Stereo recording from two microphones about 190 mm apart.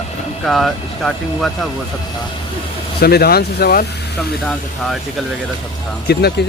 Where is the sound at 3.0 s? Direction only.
55° left (ahead or behind).